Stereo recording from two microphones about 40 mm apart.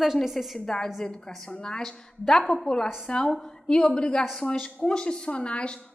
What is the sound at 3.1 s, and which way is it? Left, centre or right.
A woman's voice, centre.